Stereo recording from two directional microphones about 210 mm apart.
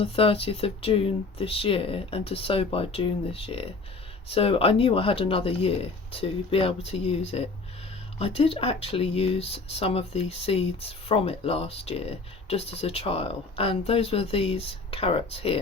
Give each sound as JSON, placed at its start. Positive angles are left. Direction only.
{"t": 0.0, "sound": "speech", "side_deg": 25}